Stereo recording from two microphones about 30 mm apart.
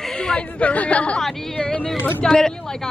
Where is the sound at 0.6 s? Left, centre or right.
Left.